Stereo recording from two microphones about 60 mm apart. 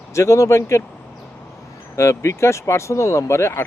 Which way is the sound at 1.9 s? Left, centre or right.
Left.